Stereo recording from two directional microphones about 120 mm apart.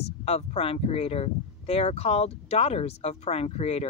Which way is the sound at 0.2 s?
60° left (ahead or behind).